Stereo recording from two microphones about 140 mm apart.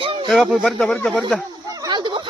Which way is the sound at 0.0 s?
40° right (ahead or behind).